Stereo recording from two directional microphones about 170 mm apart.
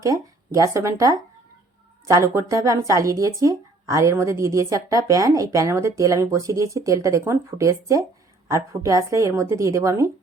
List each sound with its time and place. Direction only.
0.0 s a woman's voice: 20° right (ahead or behind)